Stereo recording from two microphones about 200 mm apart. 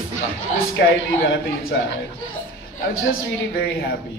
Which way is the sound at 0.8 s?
60° left (ahead or behind).